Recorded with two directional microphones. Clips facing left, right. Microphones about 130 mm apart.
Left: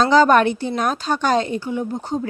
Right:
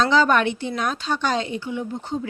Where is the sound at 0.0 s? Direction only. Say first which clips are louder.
Left 4 dB; 40° left (ahead or behind).